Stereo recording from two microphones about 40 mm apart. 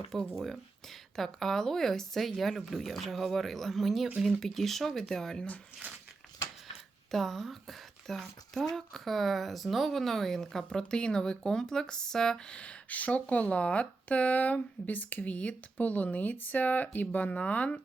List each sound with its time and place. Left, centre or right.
0.1 s speech: centre
7.1 s a woman's voice: centre
12.5 s speech: left